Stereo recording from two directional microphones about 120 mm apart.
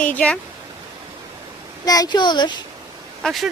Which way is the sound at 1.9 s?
35° left (ahead or behind).